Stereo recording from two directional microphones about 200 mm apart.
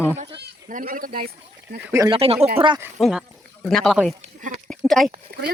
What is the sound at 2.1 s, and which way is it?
Speech, 30° right (ahead or behind).